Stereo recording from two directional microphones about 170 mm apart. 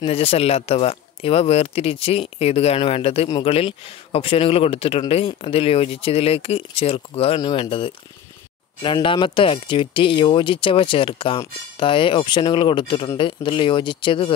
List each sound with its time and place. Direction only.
0.0 s speech: 35° left (ahead or behind)